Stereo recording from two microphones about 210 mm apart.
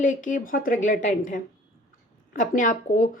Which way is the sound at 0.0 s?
40° left (ahead or behind).